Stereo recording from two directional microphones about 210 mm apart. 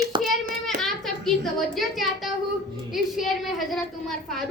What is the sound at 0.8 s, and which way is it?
A woman's voice, centre (ahead or behind).